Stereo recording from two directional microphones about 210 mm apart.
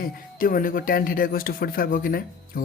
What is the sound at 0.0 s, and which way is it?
Speech, 40° left (ahead or behind).